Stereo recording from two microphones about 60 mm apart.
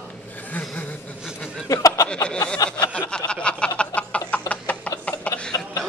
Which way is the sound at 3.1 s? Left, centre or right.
Centre.